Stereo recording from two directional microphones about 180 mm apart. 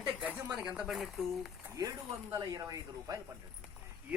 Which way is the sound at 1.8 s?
20° right (ahead or behind).